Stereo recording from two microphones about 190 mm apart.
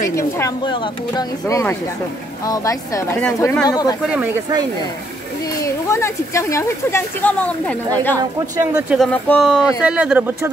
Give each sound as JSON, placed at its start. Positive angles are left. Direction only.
{"t": 0.1, "sound": "speech", "side_deg": 15}
{"t": 5.4, "sound": "speech", "side_deg": 15}
{"t": 8.2, "sound": "speech", "side_deg": -15}
{"t": 8.9, "sound": "speech", "side_deg": 5}